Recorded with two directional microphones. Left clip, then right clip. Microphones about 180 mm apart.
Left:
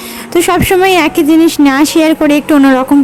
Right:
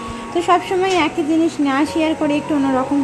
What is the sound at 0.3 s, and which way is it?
A woman's voice, 45° left (ahead or behind).